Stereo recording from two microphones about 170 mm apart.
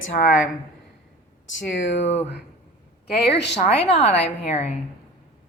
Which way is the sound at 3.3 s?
90° left.